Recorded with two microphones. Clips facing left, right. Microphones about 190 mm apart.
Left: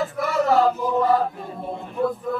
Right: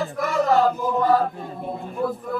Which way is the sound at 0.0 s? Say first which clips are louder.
Even; centre (ahead or behind).